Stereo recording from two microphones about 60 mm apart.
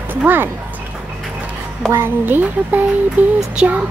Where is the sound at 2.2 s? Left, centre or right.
Right.